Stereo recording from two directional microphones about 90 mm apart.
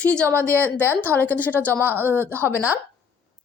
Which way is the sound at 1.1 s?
20° left (ahead or behind).